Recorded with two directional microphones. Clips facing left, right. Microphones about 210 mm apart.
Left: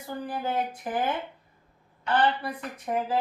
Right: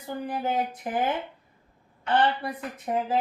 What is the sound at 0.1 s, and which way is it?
Speech, 20° right (ahead or behind).